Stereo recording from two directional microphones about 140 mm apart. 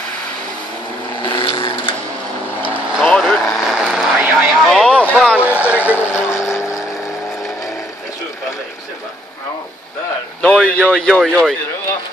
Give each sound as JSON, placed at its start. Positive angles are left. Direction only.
{"t": 1.2, "sound": "vehicle", "side_deg": 40}
{"t": 3.0, "sound": "vehicle", "side_deg": 5}
{"t": 5.4, "sound": "vehicle", "side_deg": -10}
{"t": 6.1, "sound": "vehicle", "side_deg": 20}
{"t": 10.4, "sound": "speech", "side_deg": 5}